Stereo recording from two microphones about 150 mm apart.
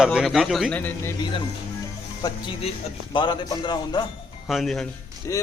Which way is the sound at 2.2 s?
25° left (ahead or behind).